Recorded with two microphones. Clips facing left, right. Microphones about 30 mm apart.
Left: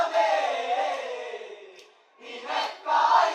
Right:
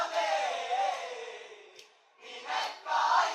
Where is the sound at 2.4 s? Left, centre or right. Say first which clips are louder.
Left 6 dB; left.